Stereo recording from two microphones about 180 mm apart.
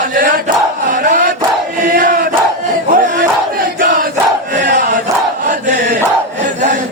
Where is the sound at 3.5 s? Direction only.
50° right (ahead or behind).